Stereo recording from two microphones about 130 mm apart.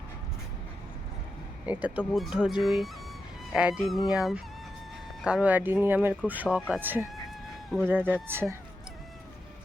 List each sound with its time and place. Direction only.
1.6 s speech: 10° right (ahead or behind)